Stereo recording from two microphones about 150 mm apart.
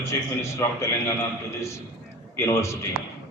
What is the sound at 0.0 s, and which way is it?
A man's voice, 20° left (ahead or behind).